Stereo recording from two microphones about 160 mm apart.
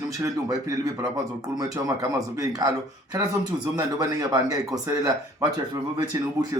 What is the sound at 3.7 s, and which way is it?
A man's voice, 25° right (ahead or behind).